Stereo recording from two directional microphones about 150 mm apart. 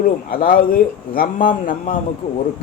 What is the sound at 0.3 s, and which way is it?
Speech, 70° left (ahead or behind).